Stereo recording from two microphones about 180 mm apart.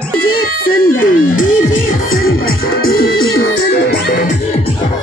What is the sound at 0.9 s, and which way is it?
Music, 50° left (ahead or behind).